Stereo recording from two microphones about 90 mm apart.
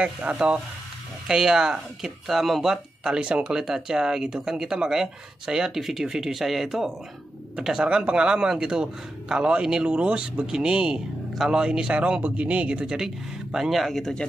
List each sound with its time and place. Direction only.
0.0 s speech: 15° right (ahead or behind); by 14.2 s 5° left (ahead or behind)